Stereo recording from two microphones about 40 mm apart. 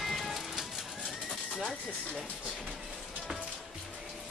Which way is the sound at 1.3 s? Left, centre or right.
Left.